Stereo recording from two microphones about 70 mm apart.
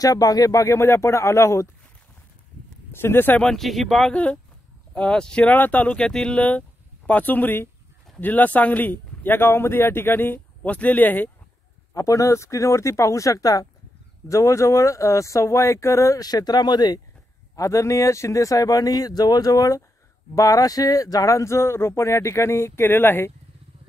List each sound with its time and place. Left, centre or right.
0.0 s speech: left
2.9 s speech: left
3.5 s speech: centre
4.1 s speech: centre
7.1 s a man's voice: left
11.9 s speech: left
14.2 s speech: left
17.6 s speech: left